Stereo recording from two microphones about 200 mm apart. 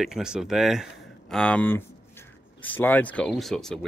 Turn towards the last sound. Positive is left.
turn(degrees=0)  # may be behind; listen again after turning